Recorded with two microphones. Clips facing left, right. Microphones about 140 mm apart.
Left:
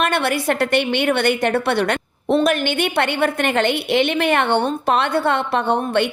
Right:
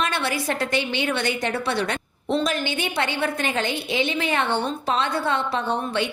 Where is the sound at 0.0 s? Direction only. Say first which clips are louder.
Left 6 dB; 60° left (ahead or behind).